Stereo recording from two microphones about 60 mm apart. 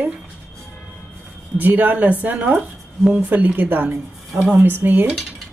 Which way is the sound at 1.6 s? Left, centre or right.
Right.